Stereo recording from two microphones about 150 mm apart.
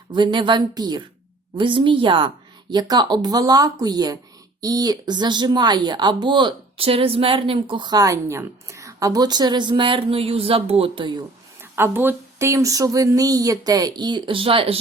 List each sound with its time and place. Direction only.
0.1 s speech: 30° right (ahead or behind)
11.6 s speech: 15° right (ahead or behind); by 14.8 s 40° right (ahead or behind)